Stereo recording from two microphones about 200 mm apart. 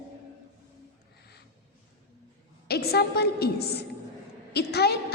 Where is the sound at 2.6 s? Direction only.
50° left (ahead or behind).